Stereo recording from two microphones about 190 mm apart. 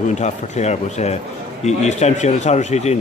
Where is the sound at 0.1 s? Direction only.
35° left (ahead or behind).